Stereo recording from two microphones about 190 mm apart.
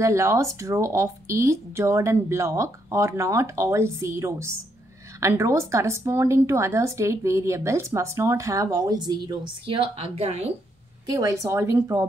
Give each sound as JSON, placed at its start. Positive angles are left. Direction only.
{"t": 0.0, "sound": "speech", "side_deg": -15}
{"t": 11.1, "sound": "speech", "side_deg": -20}